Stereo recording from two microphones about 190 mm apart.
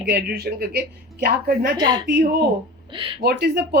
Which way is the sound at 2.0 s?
55° right (ahead or behind).